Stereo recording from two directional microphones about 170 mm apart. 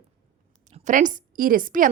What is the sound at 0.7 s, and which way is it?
A woman's voice, 50° right (ahead or behind).